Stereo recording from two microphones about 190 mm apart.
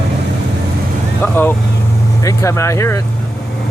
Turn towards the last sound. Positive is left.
turn(degrees=15)  # may be behind; listen again after turning